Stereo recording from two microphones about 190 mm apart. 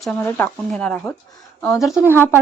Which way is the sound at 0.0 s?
10° left (ahead or behind).